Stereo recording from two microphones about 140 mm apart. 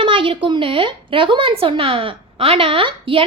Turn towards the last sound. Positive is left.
turn(degrees=-40)  # may be behind; listen again after turning